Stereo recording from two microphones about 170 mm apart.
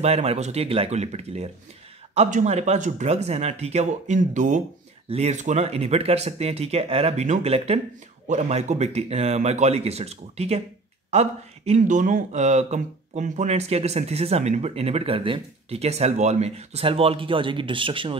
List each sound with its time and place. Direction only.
0.0 s speech: 40° right (ahead or behind)